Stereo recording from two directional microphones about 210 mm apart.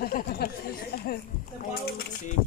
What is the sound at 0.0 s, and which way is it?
Chatter, 45° left (ahead or behind).